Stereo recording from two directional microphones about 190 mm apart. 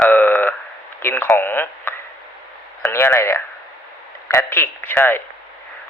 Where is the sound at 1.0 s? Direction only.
10° left (ahead or behind).